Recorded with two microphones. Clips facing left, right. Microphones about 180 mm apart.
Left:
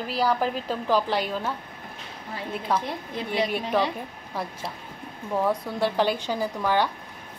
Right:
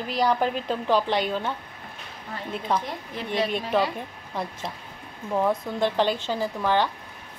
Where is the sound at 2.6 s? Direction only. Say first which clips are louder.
Even; 10° left (ahead or behind).